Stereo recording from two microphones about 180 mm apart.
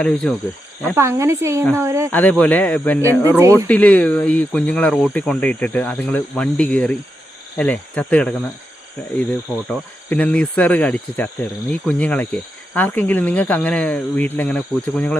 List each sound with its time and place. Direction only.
0.0 s speech: 5° left (ahead or behind)
0.9 s speech: 15° right (ahead or behind)
2.0 s speech: 10° left (ahead or behind)
10.1 s speech: 10° left (ahead or behind)